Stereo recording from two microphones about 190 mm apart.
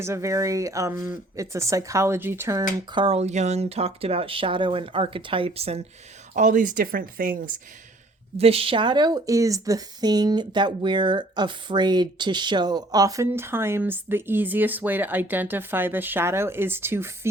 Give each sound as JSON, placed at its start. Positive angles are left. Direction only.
{"t": 0.0, "sound": "a woman's voice", "side_deg": -15}
{"t": 6.3, "sound": "speech", "side_deg": -40}
{"t": 8.4, "sound": "a woman's voice", "side_deg": -30}